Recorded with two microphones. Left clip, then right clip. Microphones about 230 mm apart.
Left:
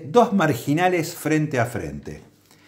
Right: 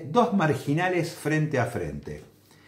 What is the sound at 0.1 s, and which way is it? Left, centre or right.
Speech, left.